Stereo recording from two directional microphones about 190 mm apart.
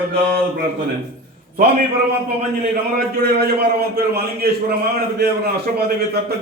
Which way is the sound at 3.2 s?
55° right (ahead or behind).